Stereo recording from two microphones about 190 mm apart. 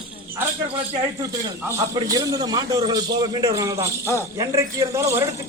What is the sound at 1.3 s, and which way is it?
A man's voice, 20° right (ahead or behind).